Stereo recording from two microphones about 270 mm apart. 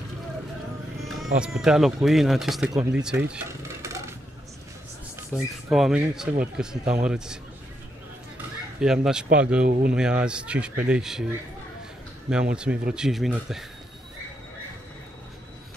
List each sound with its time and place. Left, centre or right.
1.0 s speech: centre
5.3 s speech: centre
5.7 s speech: centre
8.8 s speech: centre
9.7 s speech: right
9.9 s speech: centre
12.5 s speech: centre